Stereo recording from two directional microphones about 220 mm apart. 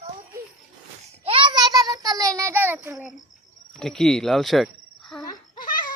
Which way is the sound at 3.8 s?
Centre (ahead or behind).